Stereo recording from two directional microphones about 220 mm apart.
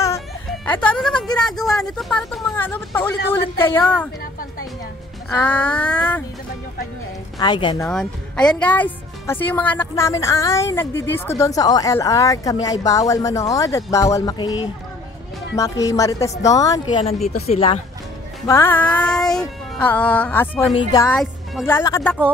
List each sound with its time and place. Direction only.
0.7 s a woman's voice: 5° left (ahead or behind)
4.2 s a sound: 40° left (ahead or behind)
5.4 s speech: 5° left (ahead or behind)
7.3 s a woman's voice: 20° left (ahead or behind)
7.9 s a woman's voice: 5° left (ahead or behind); by 17.7 s 25° left (ahead or behind)
18.5 s a woman's voice: 10° left (ahead or behind)